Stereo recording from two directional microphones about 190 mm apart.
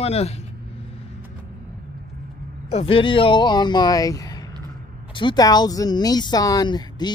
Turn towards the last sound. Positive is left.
turn(degrees=20)  # may be behind; listen again after turning